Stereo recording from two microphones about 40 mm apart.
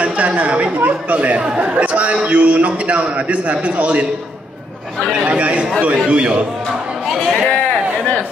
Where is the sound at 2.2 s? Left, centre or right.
Right.